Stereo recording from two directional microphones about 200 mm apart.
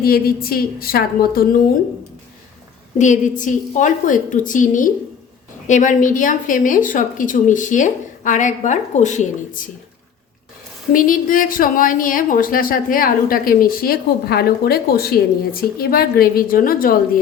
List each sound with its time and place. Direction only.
0.0 s a woman's voice: 50° left (ahead or behind)
3.0 s a woman's voice: 40° left (ahead or behind)
10.9 s a woman's voice: 45° left (ahead or behind)